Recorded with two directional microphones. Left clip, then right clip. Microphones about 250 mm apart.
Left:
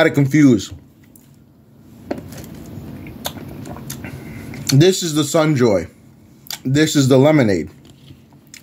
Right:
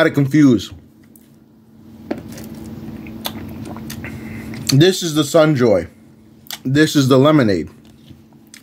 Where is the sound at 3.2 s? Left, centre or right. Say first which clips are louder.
Right 1 dB; centre.